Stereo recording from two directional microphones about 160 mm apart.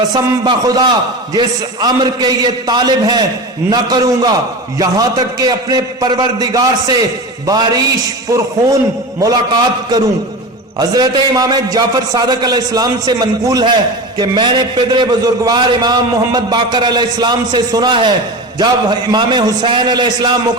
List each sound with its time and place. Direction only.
0.1 s a man's voice: 25° right (ahead or behind)